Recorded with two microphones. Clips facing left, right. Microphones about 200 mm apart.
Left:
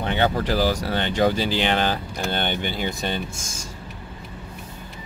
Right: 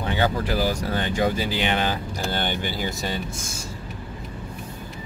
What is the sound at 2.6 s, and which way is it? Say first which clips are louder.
Speech: left 1 dB; 20° left (ahead or behind).